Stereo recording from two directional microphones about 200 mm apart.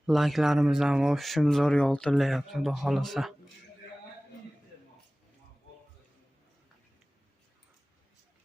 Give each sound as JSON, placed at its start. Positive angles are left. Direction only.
{"t": 0.0, "sound": "speech", "side_deg": 0}